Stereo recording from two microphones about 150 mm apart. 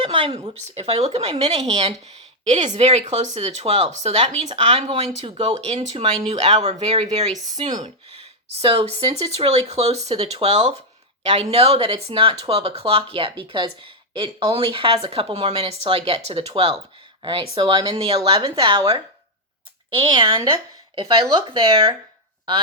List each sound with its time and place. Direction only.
0.0 s a sound: 35° right (ahead or behind)
0.8 s speech: 45° right (ahead or behind)
8.6 s speech: 40° right (ahead or behind)
17.5 s speech: 30° right (ahead or behind)